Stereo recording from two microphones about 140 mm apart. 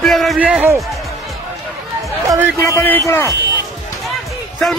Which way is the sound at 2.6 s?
15° left (ahead or behind).